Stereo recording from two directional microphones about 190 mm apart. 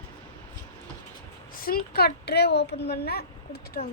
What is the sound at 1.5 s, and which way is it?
Speech, 50° left (ahead or behind).